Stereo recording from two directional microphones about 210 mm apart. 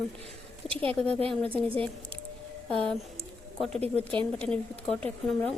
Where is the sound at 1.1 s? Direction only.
30° right (ahead or behind).